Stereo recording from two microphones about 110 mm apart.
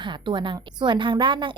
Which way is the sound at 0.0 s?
45° right (ahead or behind).